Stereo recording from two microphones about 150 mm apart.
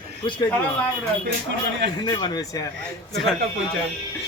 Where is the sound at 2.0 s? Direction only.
25° left (ahead or behind).